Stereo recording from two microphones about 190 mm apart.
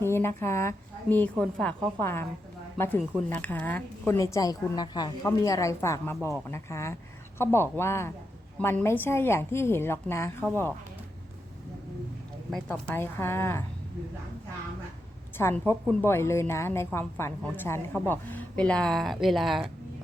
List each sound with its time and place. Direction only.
0.0 s a woman's voice: 15° left (ahead or behind)
12.6 s a woman's voice: 10° left (ahead or behind)
15.4 s a woman's voice: 10° left (ahead or behind)